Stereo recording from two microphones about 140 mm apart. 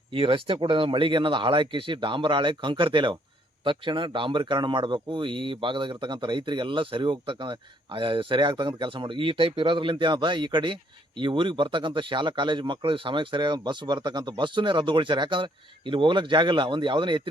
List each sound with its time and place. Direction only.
0.1 s a man's voice: 40° right (ahead or behind)